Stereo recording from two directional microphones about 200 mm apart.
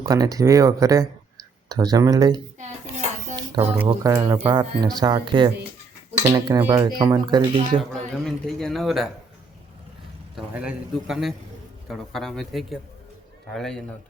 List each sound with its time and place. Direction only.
0.0 s speech: 20° right (ahead or behind)
2.6 s dishes: 35° right (ahead or behind)
3.3 s music: 20° right (ahead or behind)
3.8 s speech: 15° right (ahead or behind)
7.8 s a man's voice: centre (ahead or behind)
10.3 s a man's voice: 5° right (ahead or behind)